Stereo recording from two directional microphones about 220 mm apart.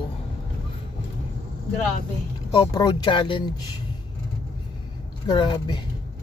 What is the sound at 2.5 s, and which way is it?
Speech, 20° left (ahead or behind).